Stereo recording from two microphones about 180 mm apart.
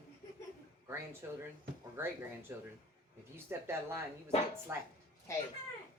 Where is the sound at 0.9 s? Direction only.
15° right (ahead or behind).